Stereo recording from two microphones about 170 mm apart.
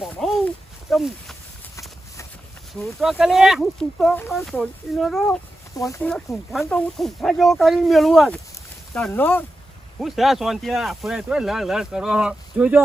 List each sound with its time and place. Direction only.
0.2 s a sound: centre (ahead or behind)
2.7 s speech: centre (ahead or behind)
5.7 s speech: 20° left (ahead or behind)
6.5 s speech: centre (ahead or behind)
10.0 s speech: centre (ahead or behind)